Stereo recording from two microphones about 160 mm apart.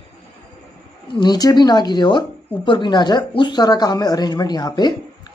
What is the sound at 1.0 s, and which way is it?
Speech, 30° left (ahead or behind).